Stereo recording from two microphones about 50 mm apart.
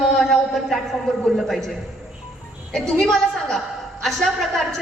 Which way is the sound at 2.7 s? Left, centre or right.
Centre.